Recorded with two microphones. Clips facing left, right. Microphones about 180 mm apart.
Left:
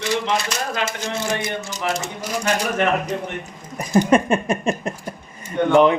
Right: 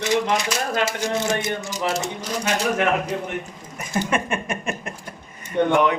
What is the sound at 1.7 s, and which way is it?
Speech, centre (ahead or behind).